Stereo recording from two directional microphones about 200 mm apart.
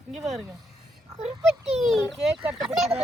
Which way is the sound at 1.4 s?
Centre (ahead or behind).